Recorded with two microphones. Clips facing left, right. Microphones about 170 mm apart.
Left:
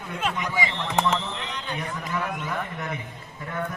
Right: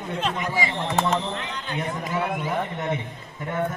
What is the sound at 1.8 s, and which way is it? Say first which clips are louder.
A man's voice: right 5 dB; 25° right (ahead or behind).